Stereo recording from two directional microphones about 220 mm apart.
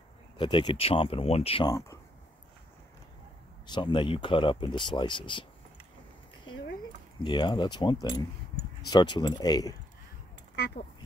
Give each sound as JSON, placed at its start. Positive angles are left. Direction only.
{"t": 0.4, "sound": "speech", "side_deg": 20}
{"t": 3.6, "sound": "speech", "side_deg": 20}
{"t": 7.2, "sound": "speech", "side_deg": 20}
{"t": 10.5, "sound": "a sound", "side_deg": 50}